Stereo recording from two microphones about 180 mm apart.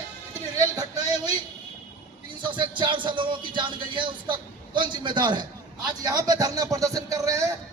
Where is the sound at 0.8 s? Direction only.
20° right (ahead or behind).